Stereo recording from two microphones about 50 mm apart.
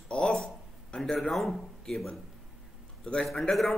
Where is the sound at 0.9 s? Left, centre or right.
Centre.